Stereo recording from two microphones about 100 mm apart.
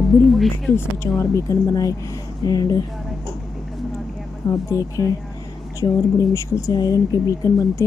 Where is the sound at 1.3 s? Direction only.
35° left (ahead or behind).